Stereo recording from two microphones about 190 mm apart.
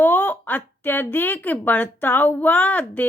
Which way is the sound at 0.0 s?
10° left (ahead or behind).